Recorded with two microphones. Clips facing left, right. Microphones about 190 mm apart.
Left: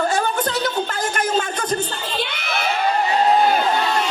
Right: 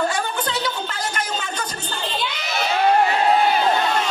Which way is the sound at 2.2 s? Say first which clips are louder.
Left 2 dB; 60° left (ahead or behind).